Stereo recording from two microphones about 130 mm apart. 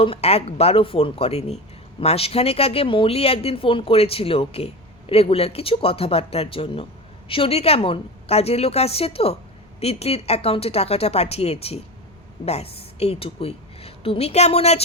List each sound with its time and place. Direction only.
0.0 s speech: 50° left (ahead or behind)